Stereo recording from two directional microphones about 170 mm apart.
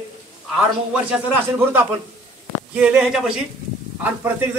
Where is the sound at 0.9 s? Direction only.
10° right (ahead or behind).